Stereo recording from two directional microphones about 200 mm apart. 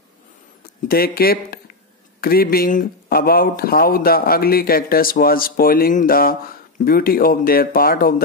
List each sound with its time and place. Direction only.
0.8 s speech: 50° left (ahead or behind)